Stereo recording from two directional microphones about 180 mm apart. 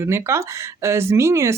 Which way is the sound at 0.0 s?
15° right (ahead or behind).